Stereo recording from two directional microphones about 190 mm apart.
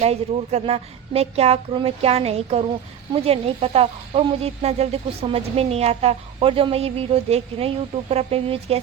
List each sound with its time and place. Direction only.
0.0 s speech: 35° right (ahead or behind)